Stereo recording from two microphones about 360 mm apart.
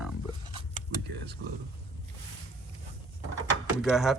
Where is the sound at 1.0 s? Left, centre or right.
Right.